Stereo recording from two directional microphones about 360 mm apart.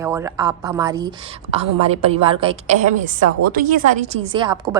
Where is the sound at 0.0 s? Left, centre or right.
Centre.